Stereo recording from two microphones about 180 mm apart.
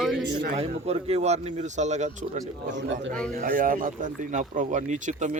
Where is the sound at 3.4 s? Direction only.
50° right (ahead or behind).